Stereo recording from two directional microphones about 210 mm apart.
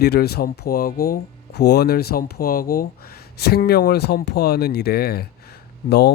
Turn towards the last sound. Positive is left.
turn(degrees=50)  # may be behind; listen again after turning